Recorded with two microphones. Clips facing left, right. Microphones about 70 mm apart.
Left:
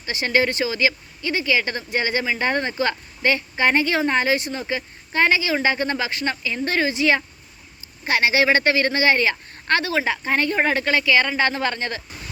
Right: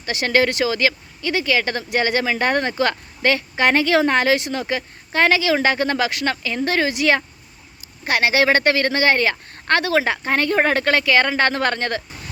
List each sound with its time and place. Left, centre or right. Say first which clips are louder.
0.0 s speech: right 2 dB; right
3.2 s speech: right 2 dB; right
4.7 s speech: right 2 dB; right